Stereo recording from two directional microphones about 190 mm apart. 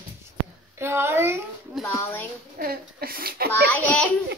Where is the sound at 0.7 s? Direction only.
15° right (ahead or behind).